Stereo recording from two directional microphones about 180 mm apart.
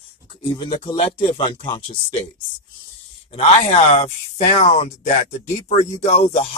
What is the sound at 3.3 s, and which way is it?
Speech, 35° left (ahead or behind).